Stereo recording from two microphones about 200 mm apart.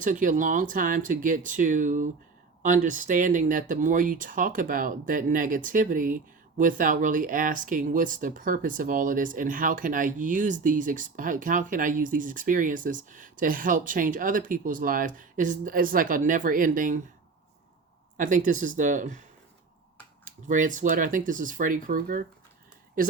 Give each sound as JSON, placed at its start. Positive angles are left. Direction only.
{"t": 0.0, "sound": "speech", "side_deg": -40}
{"t": 18.2, "sound": "speech", "side_deg": -40}
{"t": 20.2, "sound": "speech", "side_deg": -40}